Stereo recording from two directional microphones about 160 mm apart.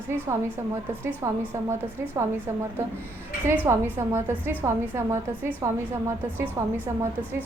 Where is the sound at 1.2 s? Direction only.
15° right (ahead or behind).